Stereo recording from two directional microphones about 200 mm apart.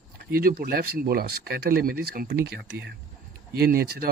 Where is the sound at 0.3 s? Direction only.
50° right (ahead or behind).